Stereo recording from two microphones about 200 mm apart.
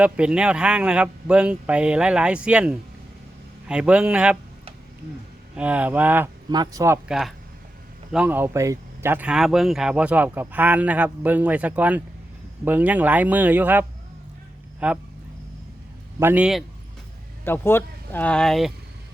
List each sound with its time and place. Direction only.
0.0 s a man's voice: 5° right (ahead or behind)
5.5 s speech: 5° right (ahead or behind)
7.1 s a man's voice: centre (ahead or behind)
16.2 s a man's voice: 5° right (ahead or behind)
17.4 s speech: 10° left (ahead or behind)